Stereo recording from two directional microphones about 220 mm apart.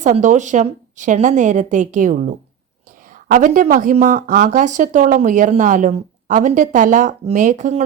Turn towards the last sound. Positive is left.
turn(degrees=-35)  # may be behind; listen again after turning